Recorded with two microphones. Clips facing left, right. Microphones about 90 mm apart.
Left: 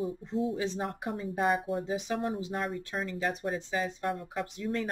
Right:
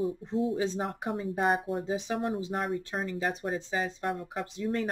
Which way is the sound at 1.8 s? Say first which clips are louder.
Right 1 dB; 25° right (ahead or behind).